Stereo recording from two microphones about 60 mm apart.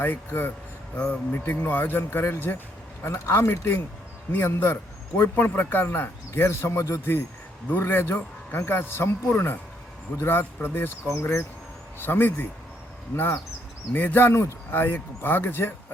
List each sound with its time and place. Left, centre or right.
0.0 s speech: left
4.3 s speech: left
14.3 s speech: left